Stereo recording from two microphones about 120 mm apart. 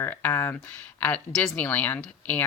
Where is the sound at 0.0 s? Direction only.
15° left (ahead or behind).